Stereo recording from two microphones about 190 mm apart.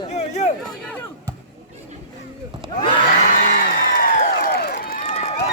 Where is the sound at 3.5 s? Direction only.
50° left (ahead or behind).